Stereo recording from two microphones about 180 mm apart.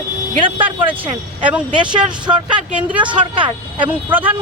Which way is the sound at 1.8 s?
25° right (ahead or behind).